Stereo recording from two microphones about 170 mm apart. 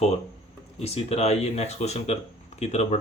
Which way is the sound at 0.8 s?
40° left (ahead or behind).